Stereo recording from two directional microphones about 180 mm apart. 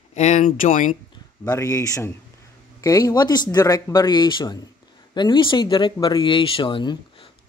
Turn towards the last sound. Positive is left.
turn(degrees=25)  # may be behind; listen again after turning